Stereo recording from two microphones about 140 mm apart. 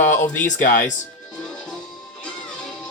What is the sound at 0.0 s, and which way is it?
Speech, 60° left (ahead or behind).